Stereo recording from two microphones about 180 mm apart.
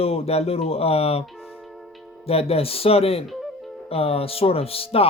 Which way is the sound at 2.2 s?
35° left (ahead or behind).